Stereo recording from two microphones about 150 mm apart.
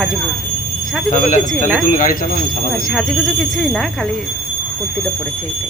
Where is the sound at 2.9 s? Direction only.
5° left (ahead or behind).